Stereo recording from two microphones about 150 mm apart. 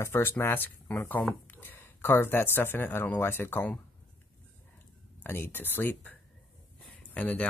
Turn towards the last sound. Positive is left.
turn(degrees=10)  # may be behind; listen again after turning